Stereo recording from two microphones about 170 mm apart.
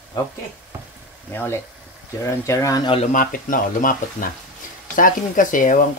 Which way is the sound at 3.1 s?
55° left (ahead or behind).